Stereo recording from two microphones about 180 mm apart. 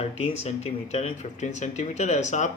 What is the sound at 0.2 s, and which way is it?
Speech, 35° left (ahead or behind).